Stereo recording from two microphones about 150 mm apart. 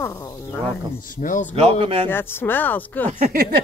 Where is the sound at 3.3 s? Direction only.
90° right.